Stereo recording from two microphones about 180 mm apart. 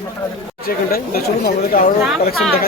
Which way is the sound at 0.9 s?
55° left (ahead or behind).